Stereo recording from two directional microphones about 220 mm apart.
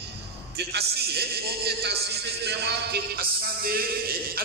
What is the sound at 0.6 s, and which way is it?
A man's voice, 45° right (ahead or behind).